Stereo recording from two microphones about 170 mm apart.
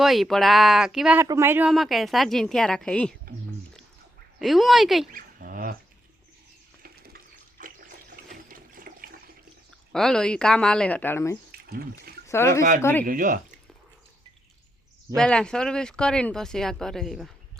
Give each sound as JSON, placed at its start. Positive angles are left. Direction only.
{"t": 0.0, "sound": "speech", "side_deg": 0}
{"t": 1.2, "sound": "speech", "side_deg": -15}
{"t": 1.7, "sound": "speech", "side_deg": 0}
{"t": 4.4, "sound": "speech", "side_deg": 0}
{"t": 5.1, "sound": "a sound", "side_deg": -55}
{"t": 6.8, "sound": "water", "side_deg": -65}
{"t": 7.6, "sound": "water", "side_deg": -55}
{"t": 8.1, "sound": "toilet flush", "side_deg": -60}
{"t": 9.9, "sound": "speech", "side_deg": 5}
{"t": 11.5, "sound": "a sound", "side_deg": -65}
{"t": 12.3, "sound": "speech", "side_deg": 15}
{"t": 13.1, "sound": "speech", "side_deg": -55}
{"t": 15.1, "sound": "speech", "side_deg": 5}